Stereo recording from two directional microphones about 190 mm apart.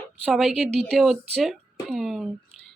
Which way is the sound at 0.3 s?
Centre (ahead or behind).